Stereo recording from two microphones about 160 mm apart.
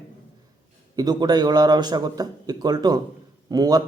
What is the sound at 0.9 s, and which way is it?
Speech, 25° right (ahead or behind).